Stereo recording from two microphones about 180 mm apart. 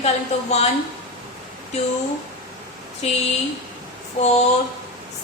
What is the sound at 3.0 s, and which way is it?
Speech, 35° left (ahead or behind).